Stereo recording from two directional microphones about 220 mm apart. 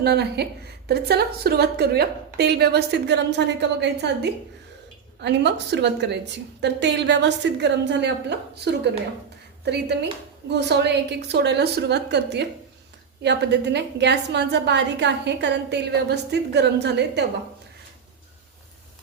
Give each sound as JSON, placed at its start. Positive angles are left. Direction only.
{"t": 0.0, "sound": "a woman's voice", "side_deg": -45}